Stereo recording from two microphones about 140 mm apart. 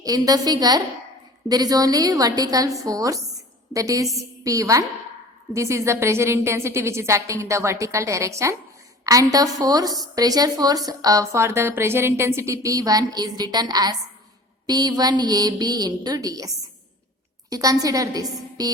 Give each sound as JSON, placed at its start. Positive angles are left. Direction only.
{"t": 0.0, "sound": "a woman's voice", "side_deg": -25}
{"t": 17.5, "sound": "a woman's voice", "side_deg": -25}